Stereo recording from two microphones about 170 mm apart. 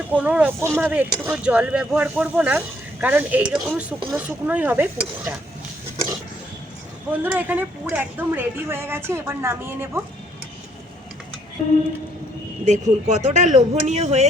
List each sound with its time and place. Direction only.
0.1 s a woman's voice: 10° right (ahead or behind)
7.3 s a woman's voice: 10° right (ahead or behind)
12.6 s speech: 45° right (ahead or behind)